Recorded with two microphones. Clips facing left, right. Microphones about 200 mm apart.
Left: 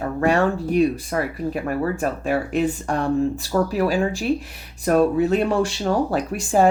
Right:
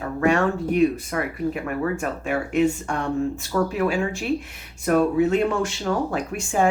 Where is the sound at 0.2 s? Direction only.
35° left (ahead or behind).